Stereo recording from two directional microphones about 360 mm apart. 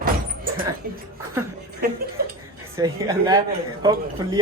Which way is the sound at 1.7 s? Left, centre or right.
Right.